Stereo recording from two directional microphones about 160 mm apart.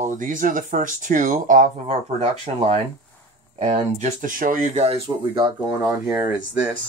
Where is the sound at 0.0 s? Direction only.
55° right (ahead or behind).